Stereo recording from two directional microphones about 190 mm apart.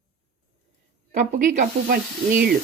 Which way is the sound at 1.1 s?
40° right (ahead or behind).